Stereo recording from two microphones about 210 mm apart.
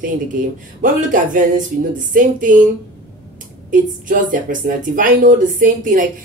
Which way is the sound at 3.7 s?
40° right (ahead or behind).